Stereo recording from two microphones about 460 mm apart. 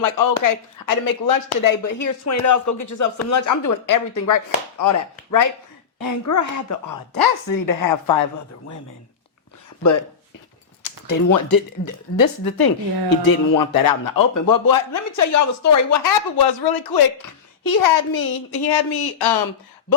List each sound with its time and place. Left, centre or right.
0.0 s a woman's voice: left
11.0 s a woman's voice: left
16.4 s a woman's voice: left